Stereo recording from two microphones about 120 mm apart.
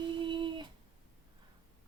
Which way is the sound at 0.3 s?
40° right (ahead or behind).